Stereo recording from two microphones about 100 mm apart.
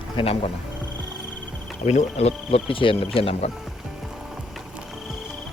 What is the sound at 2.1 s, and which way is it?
Speech, 85° left.